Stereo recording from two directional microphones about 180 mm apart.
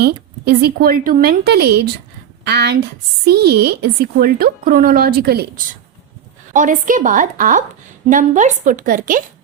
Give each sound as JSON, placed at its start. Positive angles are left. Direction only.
{"t": 0.0, "sound": "a woman's voice", "side_deg": -60}
{"t": 6.5, "sound": "a woman's voice", "side_deg": -45}